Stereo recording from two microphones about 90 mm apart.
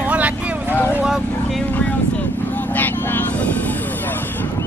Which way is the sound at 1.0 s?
Centre (ahead or behind).